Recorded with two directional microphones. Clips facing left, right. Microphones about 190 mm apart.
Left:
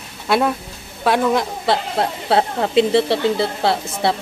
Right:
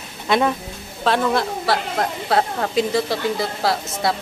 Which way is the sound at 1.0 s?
10° left (ahead or behind).